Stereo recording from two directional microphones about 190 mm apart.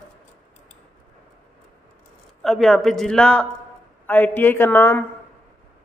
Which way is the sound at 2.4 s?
Centre (ahead or behind).